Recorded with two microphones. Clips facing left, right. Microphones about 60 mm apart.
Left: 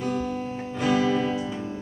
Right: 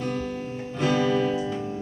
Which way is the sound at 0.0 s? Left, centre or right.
Centre.